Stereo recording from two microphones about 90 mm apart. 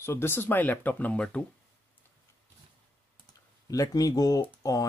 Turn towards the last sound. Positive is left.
turn(degrees=40)  # may be behind; listen again after turning